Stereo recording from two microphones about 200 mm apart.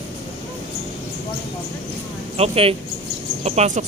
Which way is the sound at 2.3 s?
30° right (ahead or behind).